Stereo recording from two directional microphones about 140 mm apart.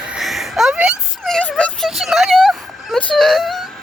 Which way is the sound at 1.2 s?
5° left (ahead or behind).